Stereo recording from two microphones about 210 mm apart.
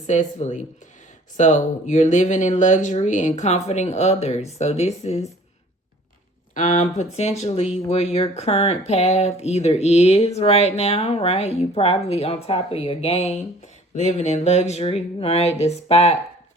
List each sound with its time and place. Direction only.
0.1 s speech: 35° left (ahead or behind)
6.5 s speech: 35° left (ahead or behind)